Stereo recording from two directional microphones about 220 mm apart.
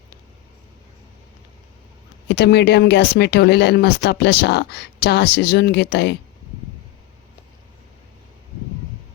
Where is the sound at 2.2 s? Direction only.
50° left (ahead or behind).